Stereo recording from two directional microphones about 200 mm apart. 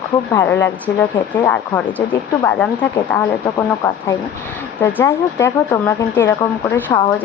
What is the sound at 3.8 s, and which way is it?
Speech, 15° left (ahead or behind).